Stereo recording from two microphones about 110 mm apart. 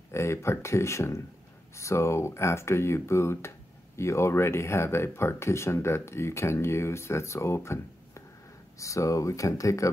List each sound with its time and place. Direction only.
0.1 s speech: 25° left (ahead or behind)